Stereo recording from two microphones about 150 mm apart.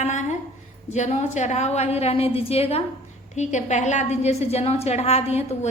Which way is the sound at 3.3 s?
50° left (ahead or behind).